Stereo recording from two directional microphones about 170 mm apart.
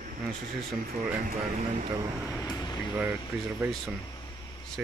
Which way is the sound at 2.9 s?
10° right (ahead or behind).